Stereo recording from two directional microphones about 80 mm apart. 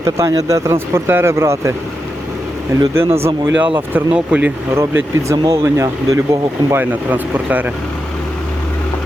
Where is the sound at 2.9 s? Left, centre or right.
Right.